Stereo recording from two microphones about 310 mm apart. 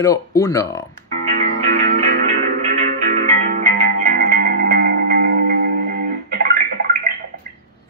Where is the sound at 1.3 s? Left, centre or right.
Right.